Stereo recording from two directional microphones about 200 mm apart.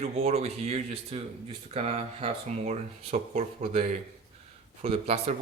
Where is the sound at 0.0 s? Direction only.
30° right (ahead or behind).